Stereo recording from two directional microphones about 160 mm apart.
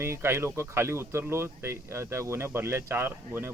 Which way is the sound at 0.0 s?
15° right (ahead or behind).